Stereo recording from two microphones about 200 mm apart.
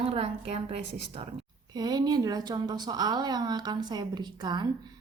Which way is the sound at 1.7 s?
20° right (ahead or behind).